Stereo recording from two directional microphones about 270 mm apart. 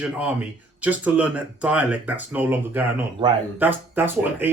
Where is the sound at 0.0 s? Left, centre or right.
Centre.